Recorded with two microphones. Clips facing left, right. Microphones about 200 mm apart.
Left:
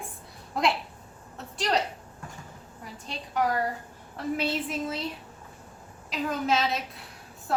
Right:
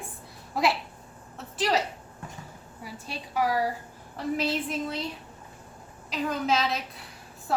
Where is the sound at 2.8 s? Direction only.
10° right (ahead or behind).